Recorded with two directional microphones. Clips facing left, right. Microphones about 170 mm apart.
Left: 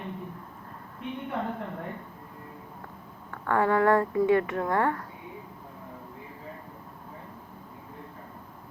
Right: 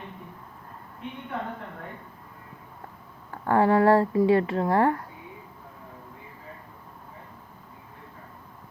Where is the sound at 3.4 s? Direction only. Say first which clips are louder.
Right 3 dB; 30° right (ahead or behind).